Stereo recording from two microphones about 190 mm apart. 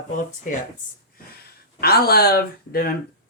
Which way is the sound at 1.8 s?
55° left (ahead or behind).